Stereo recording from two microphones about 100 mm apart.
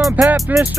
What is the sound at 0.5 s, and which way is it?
Speech, 15° right (ahead or behind).